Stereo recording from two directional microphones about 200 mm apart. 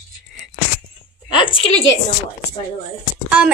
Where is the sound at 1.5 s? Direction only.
25° left (ahead or behind).